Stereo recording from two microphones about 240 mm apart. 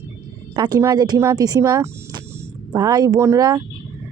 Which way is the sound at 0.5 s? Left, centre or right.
Centre.